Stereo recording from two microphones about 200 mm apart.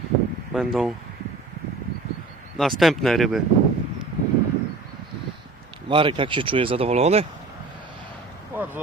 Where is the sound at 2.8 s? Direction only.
Centre (ahead or behind).